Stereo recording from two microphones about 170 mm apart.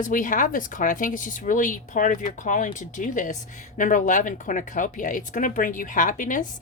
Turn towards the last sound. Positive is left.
turn(degrees=50)  # may be behind; listen again after turning